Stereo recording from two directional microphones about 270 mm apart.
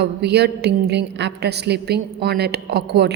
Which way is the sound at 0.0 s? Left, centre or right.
Right.